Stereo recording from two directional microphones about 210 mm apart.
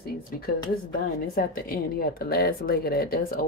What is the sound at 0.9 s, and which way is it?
Speech, 45° left (ahead or behind).